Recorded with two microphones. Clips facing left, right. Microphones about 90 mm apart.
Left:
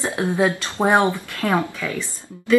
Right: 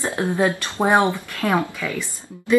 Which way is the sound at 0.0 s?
15° left (ahead or behind).